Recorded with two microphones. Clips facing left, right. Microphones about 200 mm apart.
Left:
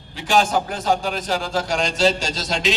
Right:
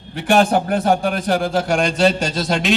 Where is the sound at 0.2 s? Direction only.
60° right (ahead or behind).